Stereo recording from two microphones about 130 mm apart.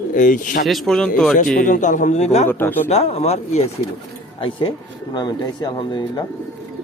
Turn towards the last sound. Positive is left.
turn(degrees=35)  # may be behind; listen again after turning